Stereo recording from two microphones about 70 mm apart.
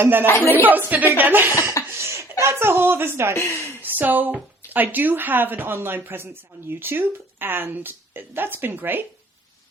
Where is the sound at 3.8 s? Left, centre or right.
Right.